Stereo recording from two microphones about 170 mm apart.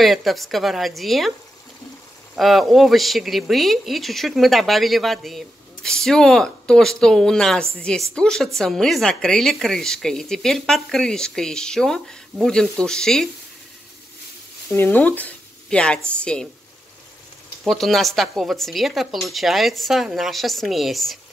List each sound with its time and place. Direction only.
0.0 s speech: centre (ahead or behind)
2.3 s speech: centre (ahead or behind)
14.7 s speech: 10° left (ahead or behind)
17.6 s speech: centre (ahead or behind)